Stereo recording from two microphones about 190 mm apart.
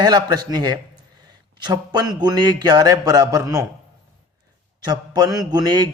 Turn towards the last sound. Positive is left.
turn(degrees=-20)  # may be behind; listen again after turning